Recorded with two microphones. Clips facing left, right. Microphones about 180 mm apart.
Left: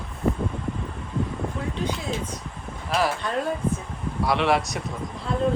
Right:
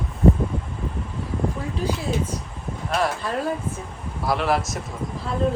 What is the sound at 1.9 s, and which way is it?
A man's voice, 5° right (ahead or behind).